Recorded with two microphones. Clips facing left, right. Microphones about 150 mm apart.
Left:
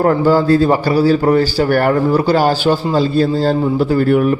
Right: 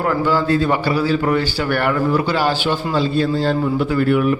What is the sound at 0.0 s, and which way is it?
A man's voice, 40° left (ahead or behind).